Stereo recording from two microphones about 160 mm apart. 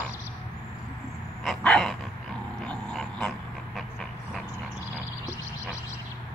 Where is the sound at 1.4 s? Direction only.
5° left (ahead or behind).